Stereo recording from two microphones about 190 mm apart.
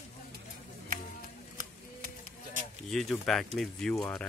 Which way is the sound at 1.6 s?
45° right (ahead or behind).